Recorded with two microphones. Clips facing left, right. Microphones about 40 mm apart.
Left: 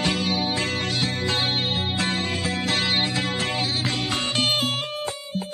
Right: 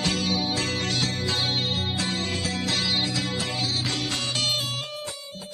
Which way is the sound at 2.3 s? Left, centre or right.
Left.